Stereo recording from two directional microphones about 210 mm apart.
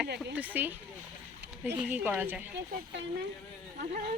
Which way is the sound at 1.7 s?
10° right (ahead or behind).